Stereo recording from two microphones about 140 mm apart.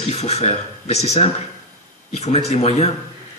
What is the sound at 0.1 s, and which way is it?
A man's voice, 50° left (ahead or behind).